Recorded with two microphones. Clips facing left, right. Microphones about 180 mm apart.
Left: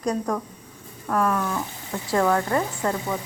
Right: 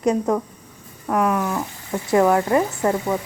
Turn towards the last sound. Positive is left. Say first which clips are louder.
# right 5 dB
turn(degrees=-20)  # may be behind; listen again after turning